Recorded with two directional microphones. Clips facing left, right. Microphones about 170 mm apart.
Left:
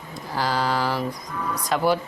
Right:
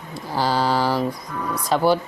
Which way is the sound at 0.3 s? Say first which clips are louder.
Right 3 dB; 30° right (ahead or behind).